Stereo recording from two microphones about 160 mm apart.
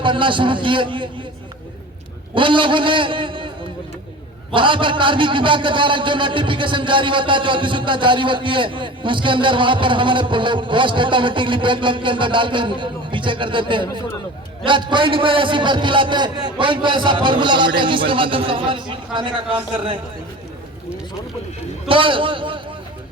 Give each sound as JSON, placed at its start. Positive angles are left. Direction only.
{"t": 0.0, "sound": "a man's voice", "side_deg": -30}
{"t": 2.3, "sound": "a man's voice", "side_deg": -30}
{"t": 4.5, "sound": "a man's voice", "side_deg": -30}
{"t": 21.8, "sound": "a man's voice", "side_deg": -30}